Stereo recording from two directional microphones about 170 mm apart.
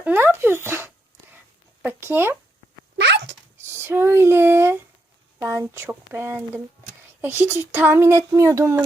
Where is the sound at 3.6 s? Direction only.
15° right (ahead or behind).